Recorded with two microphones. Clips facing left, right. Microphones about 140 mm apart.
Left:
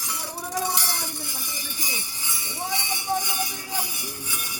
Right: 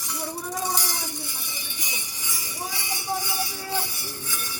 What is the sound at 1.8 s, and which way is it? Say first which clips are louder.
Music: left 2 dB; 35° left (ahead or behind).